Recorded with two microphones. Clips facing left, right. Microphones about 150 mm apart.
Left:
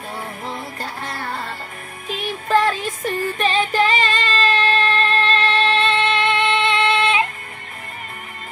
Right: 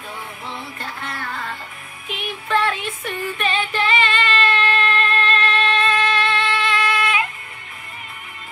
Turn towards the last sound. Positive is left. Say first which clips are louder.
# left 3 dB
turn(degrees=25)  # may be behind; listen again after turning